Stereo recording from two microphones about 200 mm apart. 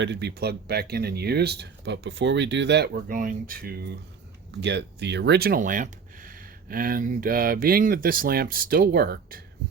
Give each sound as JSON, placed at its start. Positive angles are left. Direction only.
{"t": 0.0, "sound": "speech", "side_deg": -60}